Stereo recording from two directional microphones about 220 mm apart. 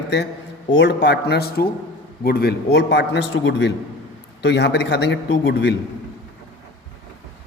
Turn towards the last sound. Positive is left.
turn(degrees=50)  # may be behind; listen again after turning